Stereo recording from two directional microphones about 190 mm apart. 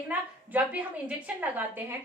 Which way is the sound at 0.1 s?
10° right (ahead or behind).